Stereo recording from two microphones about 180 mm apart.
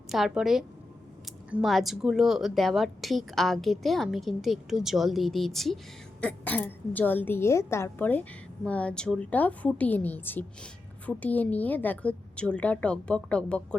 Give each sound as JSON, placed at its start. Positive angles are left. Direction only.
{"t": 0.1, "sound": "a woman's voice", "side_deg": 0}